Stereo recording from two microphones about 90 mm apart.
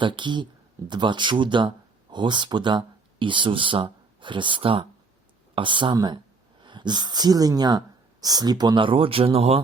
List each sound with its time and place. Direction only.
0.0 s speech: 60° right (ahead or behind); by 4.9 s 85° right
5.5 s speech: 65° right (ahead or behind)
8.8 s speech: 80° right